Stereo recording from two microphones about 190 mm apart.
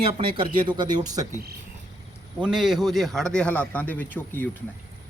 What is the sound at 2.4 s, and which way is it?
A man's voice, 5° right (ahead or behind).